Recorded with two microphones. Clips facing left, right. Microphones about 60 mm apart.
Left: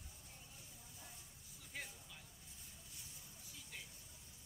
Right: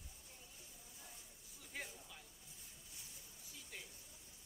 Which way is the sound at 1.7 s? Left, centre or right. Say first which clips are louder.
Right 1 dB; centre.